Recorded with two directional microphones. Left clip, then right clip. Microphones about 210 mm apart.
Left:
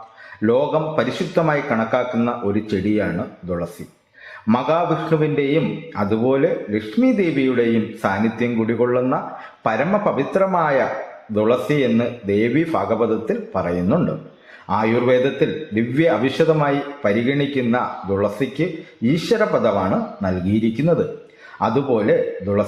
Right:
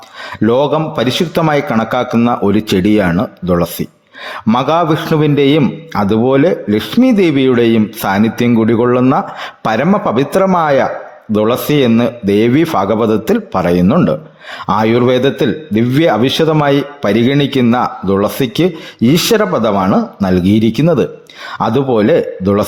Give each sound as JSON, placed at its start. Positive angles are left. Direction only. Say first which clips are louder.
{"t": 0.4, "sound": "a man's voice", "louder": "right 6 dB", "side_deg": -50}
{"t": 20.8, "sound": "a man's voice", "louder": "right 6 dB", "side_deg": -50}